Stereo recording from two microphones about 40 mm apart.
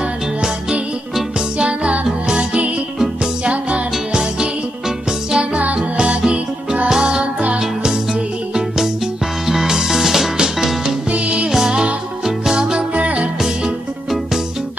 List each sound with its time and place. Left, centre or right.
1.6 s music: right
2.0 s music: centre
3.4 s music: right
3.9 s music: centre
11.1 s music: right
11.5 s music: centre
12.9 s music: right